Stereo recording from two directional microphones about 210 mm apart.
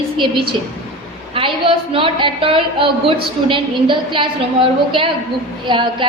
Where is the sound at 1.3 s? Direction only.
25° right (ahead or behind).